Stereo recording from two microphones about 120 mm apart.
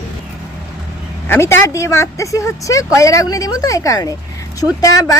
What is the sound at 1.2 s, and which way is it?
A woman's voice, 20° left (ahead or behind).